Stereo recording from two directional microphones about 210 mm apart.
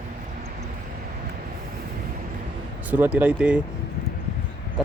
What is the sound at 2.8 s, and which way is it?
Speech, 5° right (ahead or behind).